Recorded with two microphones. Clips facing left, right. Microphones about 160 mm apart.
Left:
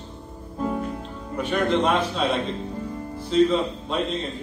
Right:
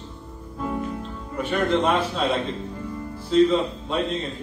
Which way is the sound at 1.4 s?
5° right (ahead or behind).